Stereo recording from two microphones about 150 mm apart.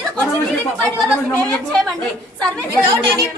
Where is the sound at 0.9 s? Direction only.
5° left (ahead or behind).